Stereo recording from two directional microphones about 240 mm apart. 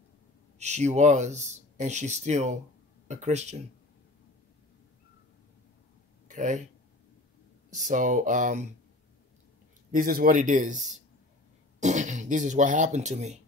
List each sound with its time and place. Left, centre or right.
0.6 s speech: right
6.2 s speech: right
7.7 s speech: right
9.8 s speech: right
11.8 s speech: right